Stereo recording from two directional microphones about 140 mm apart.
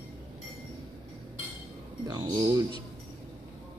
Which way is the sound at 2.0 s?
25° right (ahead or behind).